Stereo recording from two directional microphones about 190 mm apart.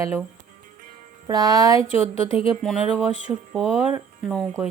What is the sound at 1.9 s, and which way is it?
Speech, 30° left (ahead or behind).